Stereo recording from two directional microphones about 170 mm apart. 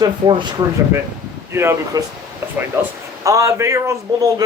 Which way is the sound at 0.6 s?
25° right (ahead or behind).